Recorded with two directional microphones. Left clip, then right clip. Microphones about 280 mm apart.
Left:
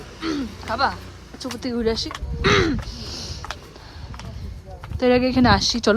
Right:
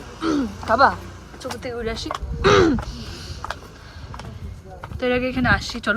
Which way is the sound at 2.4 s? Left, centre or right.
Centre.